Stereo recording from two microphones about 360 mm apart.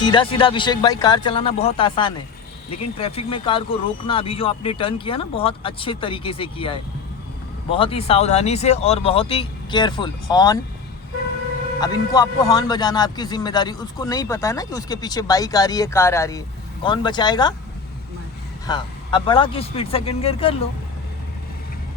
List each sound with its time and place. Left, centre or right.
0.0 s a man's voice: centre
11.8 s a man's voice: centre
18.6 s a man's voice: centre